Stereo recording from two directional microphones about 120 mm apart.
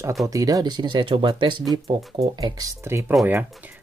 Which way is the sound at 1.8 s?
55° right (ahead or behind).